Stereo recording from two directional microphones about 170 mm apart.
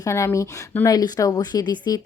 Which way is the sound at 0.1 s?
15° left (ahead or behind).